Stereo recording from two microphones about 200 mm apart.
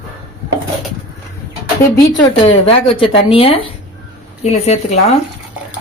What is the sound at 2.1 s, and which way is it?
A woman's voice, 30° left (ahead or behind).